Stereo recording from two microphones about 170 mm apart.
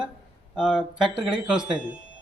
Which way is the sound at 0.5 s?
Centre (ahead or behind).